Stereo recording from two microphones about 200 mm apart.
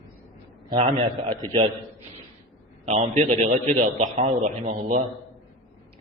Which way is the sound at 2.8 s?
35° right (ahead or behind).